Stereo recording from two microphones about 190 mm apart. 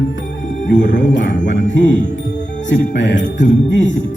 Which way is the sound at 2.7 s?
70° left (ahead or behind).